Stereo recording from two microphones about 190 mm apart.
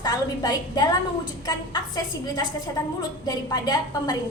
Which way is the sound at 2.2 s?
20° left (ahead or behind).